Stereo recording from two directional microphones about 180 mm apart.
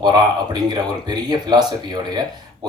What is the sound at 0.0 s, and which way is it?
Speech, 25° right (ahead or behind).